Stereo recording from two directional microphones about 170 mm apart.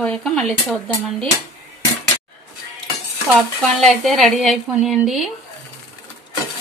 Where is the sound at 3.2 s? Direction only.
Centre (ahead or behind).